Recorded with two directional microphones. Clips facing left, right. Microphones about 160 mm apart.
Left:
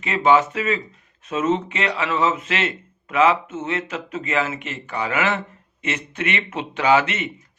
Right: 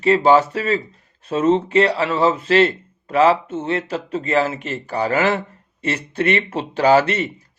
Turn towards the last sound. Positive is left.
turn(degrees=-35)  # may be behind; listen again after turning